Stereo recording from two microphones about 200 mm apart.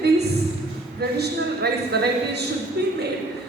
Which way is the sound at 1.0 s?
55° right (ahead or behind).